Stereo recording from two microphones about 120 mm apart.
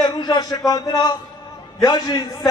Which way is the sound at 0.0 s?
35° left (ahead or behind).